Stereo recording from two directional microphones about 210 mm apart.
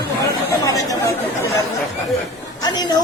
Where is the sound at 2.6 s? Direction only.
20° left (ahead or behind).